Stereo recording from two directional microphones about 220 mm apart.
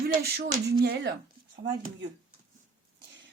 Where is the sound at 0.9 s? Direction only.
50° right (ahead or behind).